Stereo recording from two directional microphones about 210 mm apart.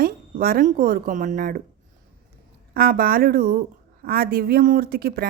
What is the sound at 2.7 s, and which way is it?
A woman's voice, 45° right (ahead or behind).